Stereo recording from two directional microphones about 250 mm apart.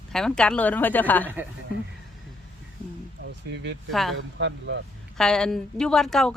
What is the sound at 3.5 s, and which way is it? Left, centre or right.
Speech, right.